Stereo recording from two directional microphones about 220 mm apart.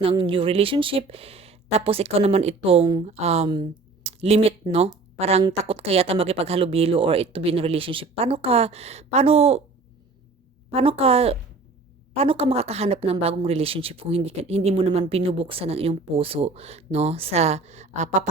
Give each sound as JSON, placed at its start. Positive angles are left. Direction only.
{"t": 0.0, "sound": "speech", "side_deg": -25}
{"t": 10.7, "sound": "speech", "side_deg": -25}